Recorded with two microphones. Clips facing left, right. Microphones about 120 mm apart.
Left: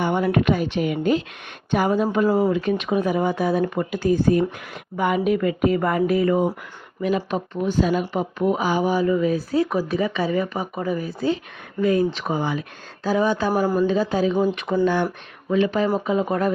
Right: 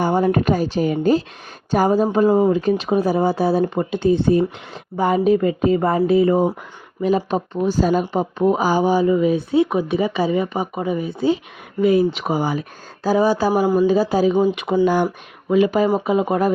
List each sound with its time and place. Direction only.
0.0 s speech: 40° right (ahead or behind)
2.2 s speech: 15° right (ahead or behind)
2.5 s speech: 35° right (ahead or behind)
13.5 s speech: 10° right (ahead or behind)
13.9 s speech: 35° right (ahead or behind)
14.7 s speech: 10° right (ahead or behind)